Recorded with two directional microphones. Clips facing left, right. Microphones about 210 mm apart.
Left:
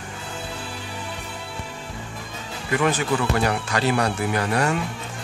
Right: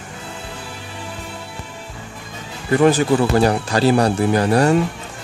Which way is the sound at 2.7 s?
35° right (ahead or behind).